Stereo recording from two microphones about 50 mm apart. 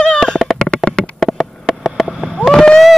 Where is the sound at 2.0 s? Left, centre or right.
Centre.